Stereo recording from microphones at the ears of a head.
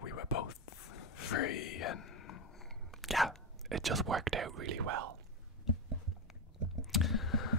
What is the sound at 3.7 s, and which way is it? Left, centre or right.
Speech, right.